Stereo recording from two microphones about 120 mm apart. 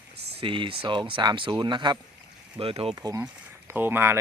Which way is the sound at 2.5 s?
50° right (ahead or behind).